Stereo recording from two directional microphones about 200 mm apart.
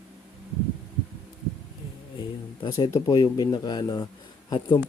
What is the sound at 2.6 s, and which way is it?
Speech, 20° left (ahead or behind).